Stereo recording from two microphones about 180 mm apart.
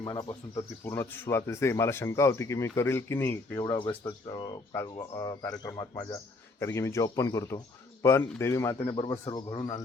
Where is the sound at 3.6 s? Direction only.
25° left (ahead or behind).